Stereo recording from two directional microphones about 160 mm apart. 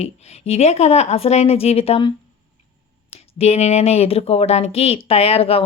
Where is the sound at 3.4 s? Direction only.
40° left (ahead or behind).